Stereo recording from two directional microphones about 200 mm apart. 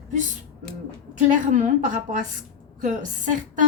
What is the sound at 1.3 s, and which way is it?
A woman's voice, 40° right (ahead or behind).